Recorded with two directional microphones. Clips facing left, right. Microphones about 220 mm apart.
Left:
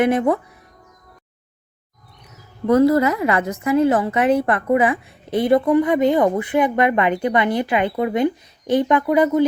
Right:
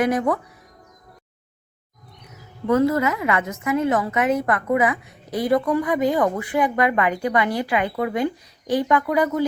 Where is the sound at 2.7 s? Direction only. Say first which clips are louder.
Left 4 dB; 35° left (ahead or behind).